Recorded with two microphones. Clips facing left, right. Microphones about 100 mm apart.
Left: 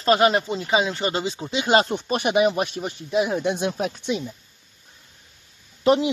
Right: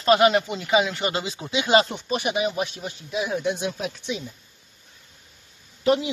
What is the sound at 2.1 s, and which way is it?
Speech, 55° left (ahead or behind).